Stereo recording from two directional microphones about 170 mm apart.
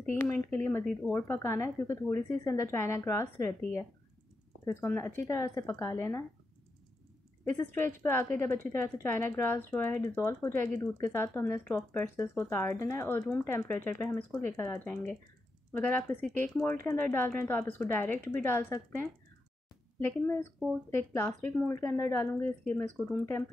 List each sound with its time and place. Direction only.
0.1 s a woman's voice: 10° left (ahead or behind)
7.4 s a woman's voice: 15° left (ahead or behind)